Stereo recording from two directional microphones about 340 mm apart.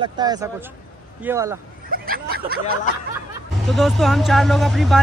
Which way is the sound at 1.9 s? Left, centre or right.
Right.